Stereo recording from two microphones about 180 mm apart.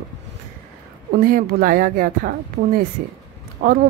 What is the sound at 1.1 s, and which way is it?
A woman's voice, 55° right (ahead or behind).